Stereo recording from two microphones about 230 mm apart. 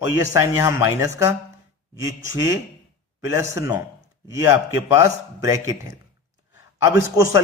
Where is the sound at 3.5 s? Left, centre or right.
Centre.